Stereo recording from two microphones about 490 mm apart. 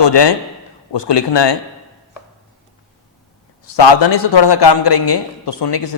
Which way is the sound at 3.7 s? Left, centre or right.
Left.